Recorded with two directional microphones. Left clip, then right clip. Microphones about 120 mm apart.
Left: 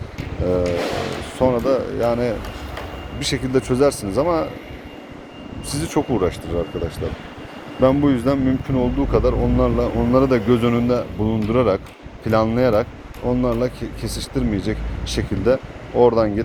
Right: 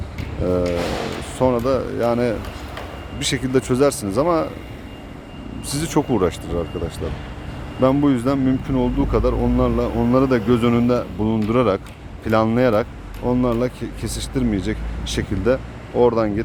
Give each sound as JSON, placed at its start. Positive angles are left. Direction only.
{"t": 1.4, "sound": "speech", "side_deg": -35}
{"t": 5.6, "sound": "speech", "side_deg": -45}
{"t": 6.8, "sound": "speech", "side_deg": -20}